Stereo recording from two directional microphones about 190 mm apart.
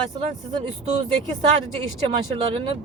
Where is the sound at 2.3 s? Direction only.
30° right (ahead or behind).